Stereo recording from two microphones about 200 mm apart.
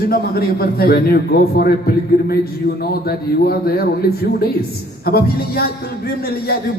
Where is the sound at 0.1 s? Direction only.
50° left (ahead or behind).